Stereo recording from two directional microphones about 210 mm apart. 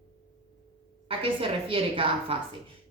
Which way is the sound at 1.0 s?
25° right (ahead or behind).